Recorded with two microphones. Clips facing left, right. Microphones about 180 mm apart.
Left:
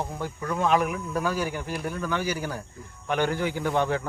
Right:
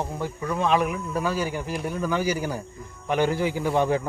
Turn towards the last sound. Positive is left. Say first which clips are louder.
# right 3 dB
turn(degrees=-5)  # may be behind; listen again after turning